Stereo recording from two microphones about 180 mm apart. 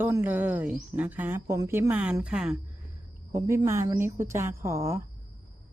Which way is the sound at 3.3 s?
15° right (ahead or behind).